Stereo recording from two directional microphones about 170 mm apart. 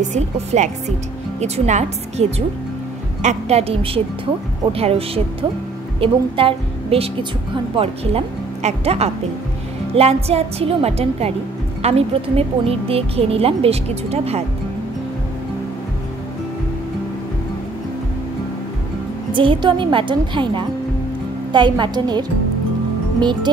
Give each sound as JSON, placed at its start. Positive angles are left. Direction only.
{"t": 0.0, "sound": "a woman's voice", "side_deg": -45}
{"t": 19.3, "sound": "a woman's voice", "side_deg": -30}